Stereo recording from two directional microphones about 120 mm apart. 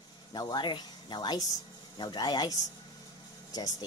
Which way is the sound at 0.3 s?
35° left (ahead or behind).